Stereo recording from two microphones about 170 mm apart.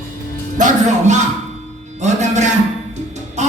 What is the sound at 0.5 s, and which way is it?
Music, 45° right (ahead or behind).